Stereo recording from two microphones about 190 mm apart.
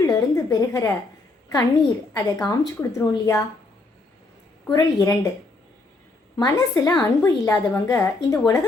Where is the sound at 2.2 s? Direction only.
20° left (ahead or behind).